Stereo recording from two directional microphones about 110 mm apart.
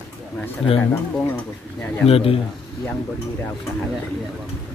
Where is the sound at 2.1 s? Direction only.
60° left (ahead or behind).